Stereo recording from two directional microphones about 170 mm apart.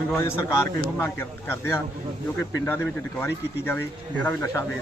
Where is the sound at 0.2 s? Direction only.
15° left (ahead or behind).